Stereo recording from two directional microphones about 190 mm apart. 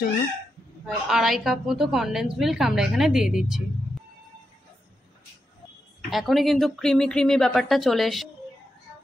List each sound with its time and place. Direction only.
0.8 s speech: centre (ahead or behind)
6.0 s speech: centre (ahead or behind)